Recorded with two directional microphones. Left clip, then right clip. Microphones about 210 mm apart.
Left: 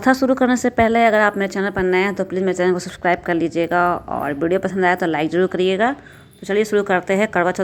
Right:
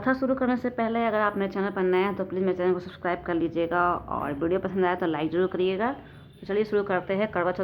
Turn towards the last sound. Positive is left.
turn(degrees=25)  # may be behind; listen again after turning